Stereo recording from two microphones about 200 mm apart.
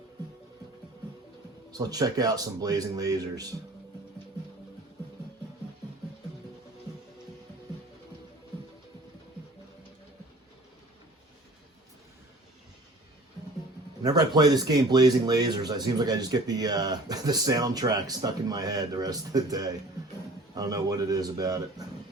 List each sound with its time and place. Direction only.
1.7 s speech: 20° right (ahead or behind)
14.0 s speech: 20° right (ahead or behind)